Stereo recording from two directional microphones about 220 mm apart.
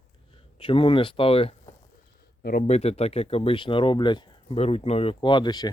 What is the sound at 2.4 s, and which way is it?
Speech, 40° left (ahead or behind).